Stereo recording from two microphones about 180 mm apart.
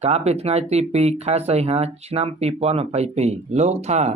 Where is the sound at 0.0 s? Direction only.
35° right (ahead or behind).